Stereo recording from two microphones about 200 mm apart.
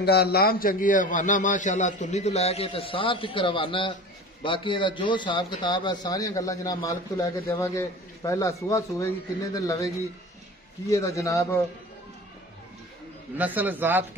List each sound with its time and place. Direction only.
0.0 s a man's voice: 50° left (ahead or behind); by 9.8 s 15° left (ahead or behind)
10.9 s a man's voice: 15° left (ahead or behind)
13.4 s a man's voice: 10° right (ahead or behind)